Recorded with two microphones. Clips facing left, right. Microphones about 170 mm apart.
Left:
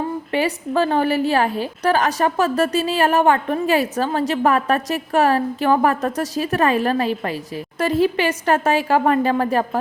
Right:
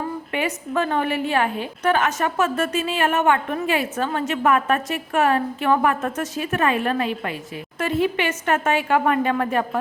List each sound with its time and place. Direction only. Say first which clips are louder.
0.3 s a woman's voice: left 4 dB; 35° left (ahead or behind)